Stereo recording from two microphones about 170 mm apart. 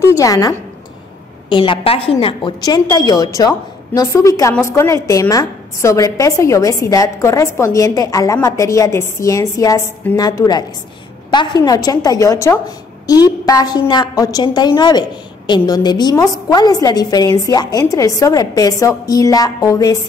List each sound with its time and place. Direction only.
0.0 s a woman's voice: 20° left (ahead or behind)
1.5 s a woman's voice: 30° left (ahead or behind)